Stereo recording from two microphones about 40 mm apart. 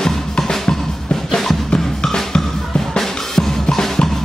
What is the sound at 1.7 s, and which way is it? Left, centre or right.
Music, centre.